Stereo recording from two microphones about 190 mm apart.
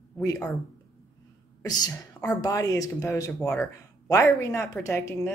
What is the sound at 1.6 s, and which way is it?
A woman's voice, 20° left (ahead or behind).